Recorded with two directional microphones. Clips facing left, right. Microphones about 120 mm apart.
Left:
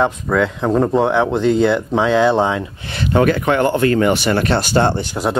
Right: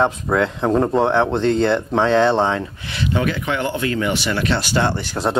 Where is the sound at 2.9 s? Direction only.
50° left (ahead or behind).